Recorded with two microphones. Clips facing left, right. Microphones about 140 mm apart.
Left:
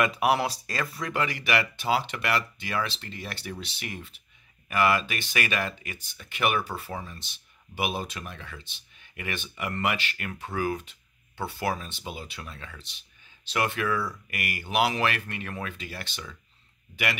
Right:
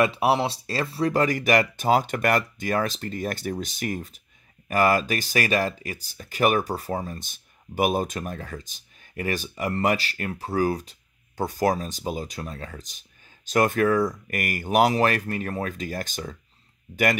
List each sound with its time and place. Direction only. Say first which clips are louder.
0.0 s speech: right 3 dB; 30° right (ahead or behind); by 17.2 s 45° right (ahead or behind)